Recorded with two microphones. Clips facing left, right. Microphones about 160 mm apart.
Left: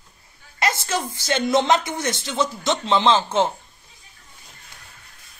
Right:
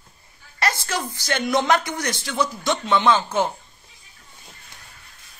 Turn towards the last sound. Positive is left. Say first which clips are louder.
# left 1 dB
turn(degrees=25)  # may be behind; listen again after turning